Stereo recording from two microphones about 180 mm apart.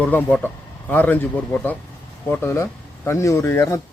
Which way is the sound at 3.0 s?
15° left (ahead or behind).